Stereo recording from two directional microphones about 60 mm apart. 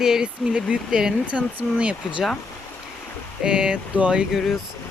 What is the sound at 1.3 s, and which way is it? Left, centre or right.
Speech, right.